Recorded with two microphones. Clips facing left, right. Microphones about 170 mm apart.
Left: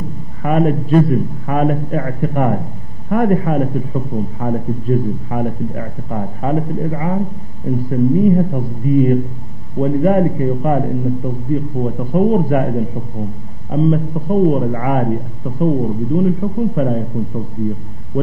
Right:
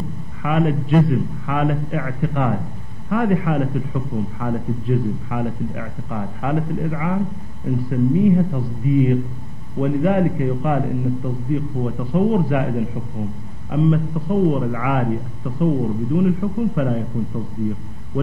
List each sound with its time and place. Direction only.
0.4 s a man's voice: 40° left (ahead or behind)